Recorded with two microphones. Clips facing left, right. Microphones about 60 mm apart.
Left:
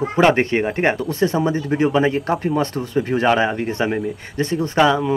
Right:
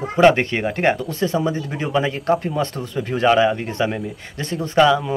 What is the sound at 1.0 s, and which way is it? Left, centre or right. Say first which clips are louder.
Speech: left 2 dB; left.